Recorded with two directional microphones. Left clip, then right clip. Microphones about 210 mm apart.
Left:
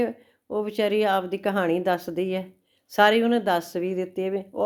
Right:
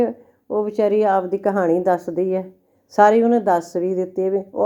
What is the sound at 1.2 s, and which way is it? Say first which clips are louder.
Speech: right 6 dB; 35° left (ahead or behind).